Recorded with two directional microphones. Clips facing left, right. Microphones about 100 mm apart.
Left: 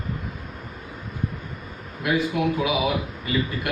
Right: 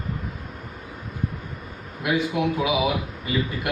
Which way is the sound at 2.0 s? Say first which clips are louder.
Even; 20° right (ahead or behind).